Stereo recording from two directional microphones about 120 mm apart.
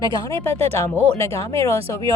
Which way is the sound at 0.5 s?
60° right (ahead or behind).